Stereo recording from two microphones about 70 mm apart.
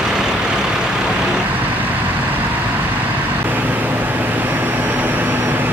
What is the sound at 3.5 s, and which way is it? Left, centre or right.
Vehicle, right.